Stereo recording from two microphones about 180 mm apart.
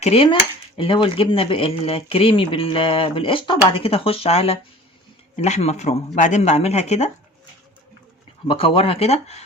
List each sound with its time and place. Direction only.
0.0 s speech: 35° left (ahead or behind)
8.4 s speech: 30° left (ahead or behind)